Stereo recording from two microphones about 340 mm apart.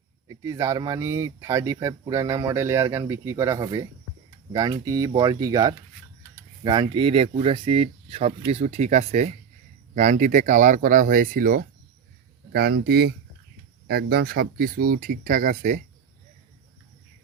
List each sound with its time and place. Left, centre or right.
0.3 s speech: centre